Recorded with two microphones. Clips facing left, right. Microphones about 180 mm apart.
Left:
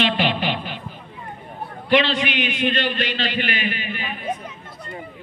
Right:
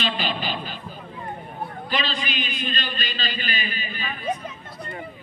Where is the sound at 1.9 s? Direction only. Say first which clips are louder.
Left 10 dB; 75° left (ahead or behind).